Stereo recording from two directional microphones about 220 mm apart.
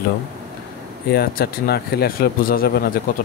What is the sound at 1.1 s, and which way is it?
Speech, 45° left (ahead or behind).